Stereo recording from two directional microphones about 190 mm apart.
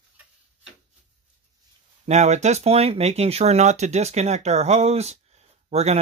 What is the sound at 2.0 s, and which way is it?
Speech, 35° right (ahead or behind).